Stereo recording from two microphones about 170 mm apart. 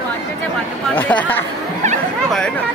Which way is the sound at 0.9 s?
10° left (ahead or behind).